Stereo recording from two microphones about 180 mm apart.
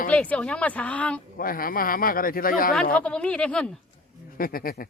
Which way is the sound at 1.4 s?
55° left (ahead or behind).